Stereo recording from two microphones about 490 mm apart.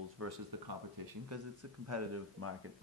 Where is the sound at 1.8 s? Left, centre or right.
Right.